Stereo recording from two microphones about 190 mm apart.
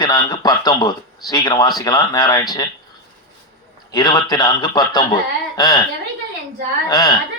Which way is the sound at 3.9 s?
20° left (ahead or behind).